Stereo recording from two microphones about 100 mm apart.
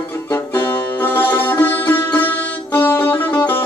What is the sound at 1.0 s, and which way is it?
Music, 20° left (ahead or behind).